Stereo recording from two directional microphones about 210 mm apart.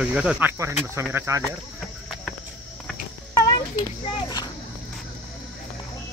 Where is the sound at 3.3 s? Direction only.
20° left (ahead or behind).